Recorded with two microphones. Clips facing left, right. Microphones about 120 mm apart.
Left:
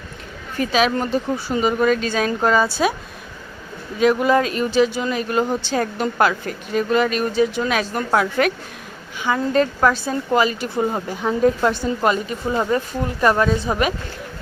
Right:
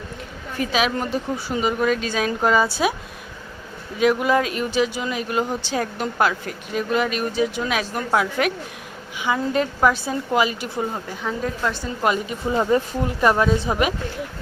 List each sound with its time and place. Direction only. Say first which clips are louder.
0.5 s speech: left 3 dB; 5° right (ahead or behind)
4.0 s speech: left 2 dB; 10° right (ahead or behind)
10.9 s a woman's voice: left 5 dB; 25° left (ahead or behind)
12.0 s speech: even; 15° right (ahead or behind)